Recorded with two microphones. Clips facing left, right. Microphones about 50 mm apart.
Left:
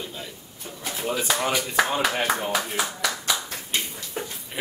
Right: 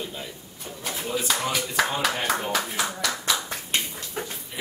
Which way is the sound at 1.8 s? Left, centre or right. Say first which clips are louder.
Left 2 dB; centre.